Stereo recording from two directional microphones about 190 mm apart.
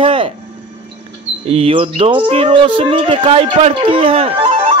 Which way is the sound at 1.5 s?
30° right (ahead or behind).